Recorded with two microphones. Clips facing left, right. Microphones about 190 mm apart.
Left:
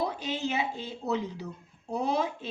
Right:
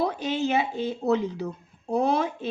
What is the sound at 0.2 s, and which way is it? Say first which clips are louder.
A woman's voice: right 6 dB; 60° right (ahead or behind).